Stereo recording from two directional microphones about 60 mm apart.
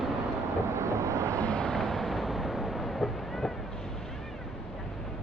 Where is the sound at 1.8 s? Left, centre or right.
Centre.